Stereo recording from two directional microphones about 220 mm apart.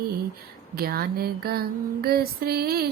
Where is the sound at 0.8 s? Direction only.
45° right (ahead or behind).